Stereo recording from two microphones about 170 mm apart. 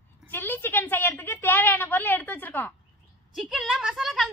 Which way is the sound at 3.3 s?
Centre (ahead or behind).